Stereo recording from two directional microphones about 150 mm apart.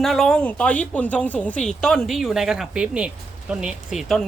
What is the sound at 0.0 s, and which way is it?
Speech, centre (ahead or behind).